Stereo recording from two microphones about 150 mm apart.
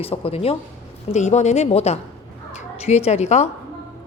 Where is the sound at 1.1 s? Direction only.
50° left (ahead or behind).